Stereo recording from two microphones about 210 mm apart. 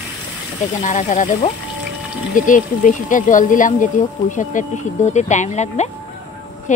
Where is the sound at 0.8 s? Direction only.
35° left (ahead or behind).